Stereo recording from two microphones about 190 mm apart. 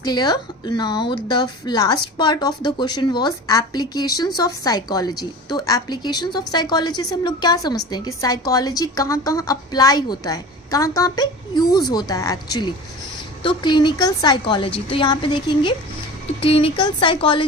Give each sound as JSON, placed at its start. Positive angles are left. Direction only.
{"t": 0.0, "sound": "a woman's voice", "side_deg": 20}